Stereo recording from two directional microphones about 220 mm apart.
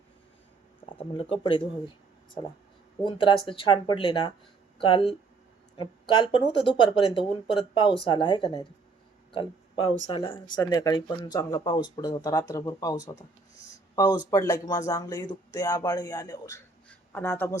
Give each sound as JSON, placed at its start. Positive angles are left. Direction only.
{"t": 1.1, "sound": "speech", "side_deg": 25}
{"t": 3.0, "sound": "speech", "side_deg": 20}